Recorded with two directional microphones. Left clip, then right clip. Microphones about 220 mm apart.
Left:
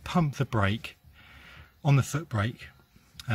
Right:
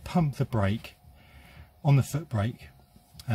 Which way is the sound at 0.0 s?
5° left (ahead or behind).